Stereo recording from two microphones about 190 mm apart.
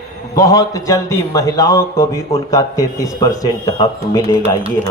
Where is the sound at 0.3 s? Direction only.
20° left (ahead or behind).